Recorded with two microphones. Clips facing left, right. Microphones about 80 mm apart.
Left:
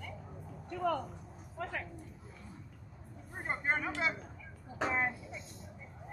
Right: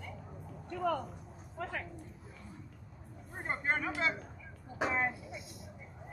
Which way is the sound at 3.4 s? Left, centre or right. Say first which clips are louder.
Even; centre.